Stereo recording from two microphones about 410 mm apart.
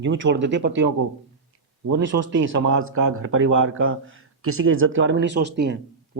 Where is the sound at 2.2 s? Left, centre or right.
Right.